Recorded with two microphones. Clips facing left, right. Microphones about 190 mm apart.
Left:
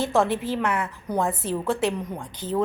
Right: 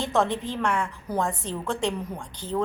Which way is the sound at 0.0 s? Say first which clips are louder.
Left 2 dB; 5° left (ahead or behind).